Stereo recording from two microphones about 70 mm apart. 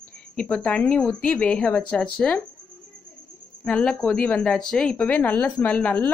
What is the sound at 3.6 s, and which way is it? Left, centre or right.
Speech, centre.